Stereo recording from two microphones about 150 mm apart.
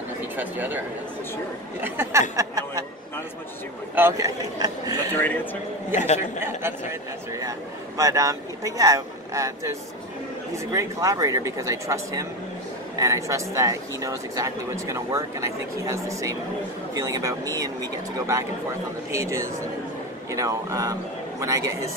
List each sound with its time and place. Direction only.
0.4 s a man's voice: 10° right (ahead or behind)
3.9 s a man's voice: 15° right (ahead or behind)
4.6 s speech: 25° right (ahead or behind)
5.1 s a man's voice: 10° left (ahead or behind)
5.9 s speech: 50° left (ahead or behind)
6.4 s a man's voice: 15° right (ahead or behind)
19.1 s speech: 20° right (ahead or behind)